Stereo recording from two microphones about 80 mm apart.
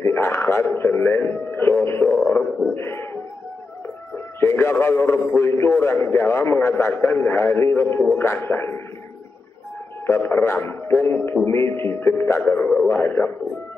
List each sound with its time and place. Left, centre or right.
0.0 s a sound: left
0.7 s a man's voice: left
2.1 s a sound: left
4.4 s a man's voice: left
10.0 s a man's voice: left
11.1 s a man's voice: left
11.4 s a man's voice: left